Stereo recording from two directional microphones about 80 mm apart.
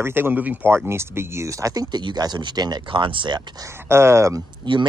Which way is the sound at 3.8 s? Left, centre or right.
Right.